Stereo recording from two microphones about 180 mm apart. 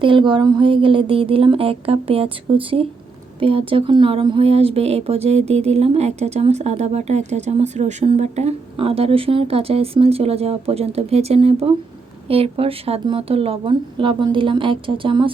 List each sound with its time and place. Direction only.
0.0 s a woman's voice: 25° right (ahead or behind)